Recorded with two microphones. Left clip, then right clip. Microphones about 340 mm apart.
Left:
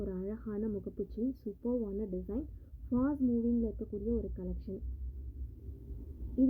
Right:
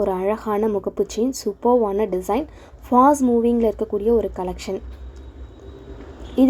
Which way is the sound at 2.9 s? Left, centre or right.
Right.